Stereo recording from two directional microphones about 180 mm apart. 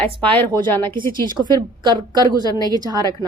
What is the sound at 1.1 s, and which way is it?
A woman's voice, 25° right (ahead or behind).